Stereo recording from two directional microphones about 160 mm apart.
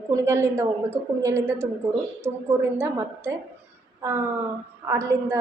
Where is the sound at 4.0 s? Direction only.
15° right (ahead or behind).